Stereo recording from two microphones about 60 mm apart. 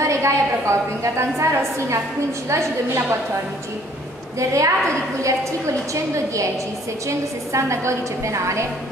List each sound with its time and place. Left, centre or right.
0.0 s a woman's voice: right
2.5 s a woman's voice: right
4.4 s a woman's voice: right
7.1 s a woman's voice: right